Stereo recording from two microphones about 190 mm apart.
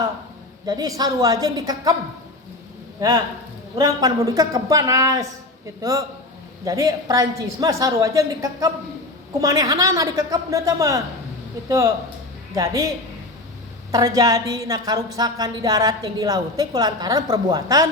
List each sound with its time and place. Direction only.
0.6 s a woman's voice: 20° right (ahead or behind)
3.0 s a woman's voice: 15° right (ahead or behind)
12.5 s a woman's voice: 20° right (ahead or behind)
13.9 s a woman's voice: 20° right (ahead or behind)